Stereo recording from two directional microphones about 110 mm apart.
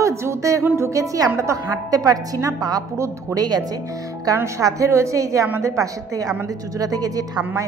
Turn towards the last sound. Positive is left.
turn(degrees=-35)  # may be behind; listen again after turning